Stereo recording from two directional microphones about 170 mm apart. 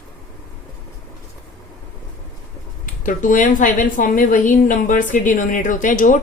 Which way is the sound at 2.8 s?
50° left (ahead or behind).